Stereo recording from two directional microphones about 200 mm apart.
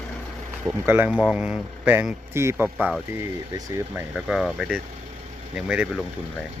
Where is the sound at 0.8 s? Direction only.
10° right (ahead or behind).